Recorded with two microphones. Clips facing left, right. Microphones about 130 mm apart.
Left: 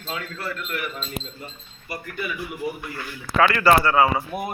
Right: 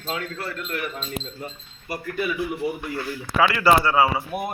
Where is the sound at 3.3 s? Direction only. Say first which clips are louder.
Left 1 dB; 10° right (ahead or behind).